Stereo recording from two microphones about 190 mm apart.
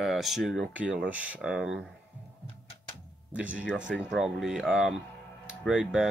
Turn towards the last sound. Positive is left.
turn(degrees=-5)  # may be behind; listen again after turning